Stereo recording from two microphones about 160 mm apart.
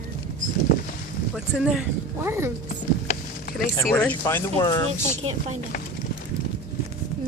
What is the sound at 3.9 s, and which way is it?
Speech, 10° left (ahead or behind).